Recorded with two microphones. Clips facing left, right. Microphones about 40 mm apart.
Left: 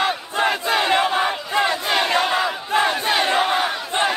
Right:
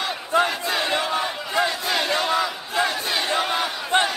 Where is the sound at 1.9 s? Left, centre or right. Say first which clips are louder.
Left 2 dB; left.